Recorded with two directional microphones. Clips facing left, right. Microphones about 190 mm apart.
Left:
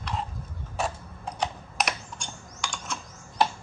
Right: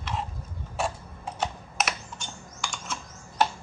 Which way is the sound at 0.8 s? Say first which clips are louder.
Even; centre (ahead or behind).